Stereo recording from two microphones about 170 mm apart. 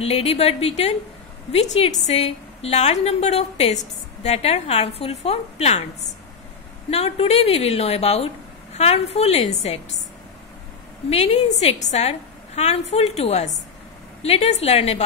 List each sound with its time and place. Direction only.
0.0 s a woman's voice: 35° left (ahead or behind)
2.0 s a woman's voice: 40° left (ahead or behind)
6.9 s a woman's voice: 40° left (ahead or behind)
11.1 s a woman's voice: 35° left (ahead or behind)